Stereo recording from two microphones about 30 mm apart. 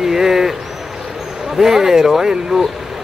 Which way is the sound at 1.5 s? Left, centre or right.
Centre.